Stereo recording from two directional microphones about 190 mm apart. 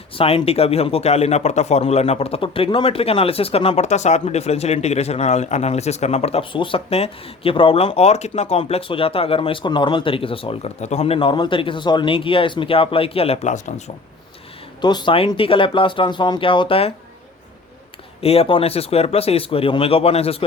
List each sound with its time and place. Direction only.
0.2 s a man's voice: 30° left (ahead or behind)
14.8 s speech: 25° left (ahead or behind)
18.2 s a man's voice: 30° left (ahead or behind)